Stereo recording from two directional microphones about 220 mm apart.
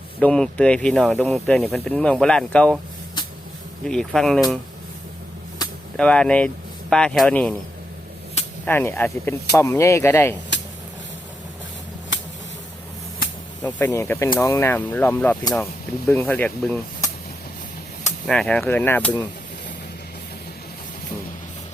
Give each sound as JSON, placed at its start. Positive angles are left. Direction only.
{"t": 0.2, "sound": "speech", "side_deg": 5}
{"t": 3.8, "sound": "speech", "side_deg": 0}
{"t": 6.0, "sound": "speech", "side_deg": 5}
{"t": 8.6, "sound": "speech", "side_deg": 10}
{"t": 12.1, "sound": "a sound", "side_deg": 55}
{"t": 13.6, "sound": "speech", "side_deg": 10}
{"t": 18.3, "sound": "speech", "side_deg": 5}